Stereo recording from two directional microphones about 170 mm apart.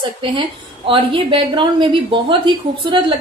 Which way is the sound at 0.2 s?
30° right (ahead or behind).